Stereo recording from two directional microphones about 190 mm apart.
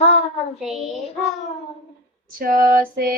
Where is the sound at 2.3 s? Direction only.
45° right (ahead or behind).